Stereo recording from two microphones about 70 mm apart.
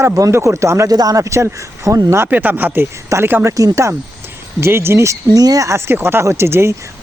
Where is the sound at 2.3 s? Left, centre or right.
Right.